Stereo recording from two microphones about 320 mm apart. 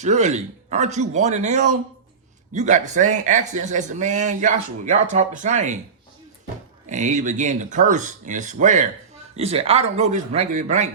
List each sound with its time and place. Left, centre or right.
0.0 s a man's voice: right
6.8 s a man's voice: right